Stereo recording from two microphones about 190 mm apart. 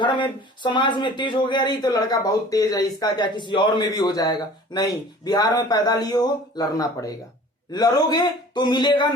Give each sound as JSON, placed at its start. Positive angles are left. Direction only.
{"t": 0.0, "sound": "speech", "side_deg": 25}